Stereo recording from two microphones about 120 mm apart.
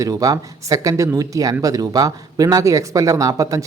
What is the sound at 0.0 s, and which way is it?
Speech, 30° right (ahead or behind).